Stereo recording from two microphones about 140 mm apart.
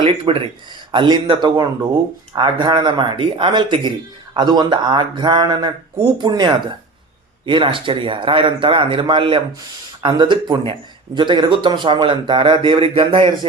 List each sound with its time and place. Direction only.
0.0 s speech: 40° right (ahead or behind)